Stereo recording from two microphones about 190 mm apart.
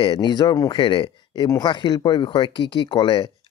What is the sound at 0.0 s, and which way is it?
Speech, 25° left (ahead or behind).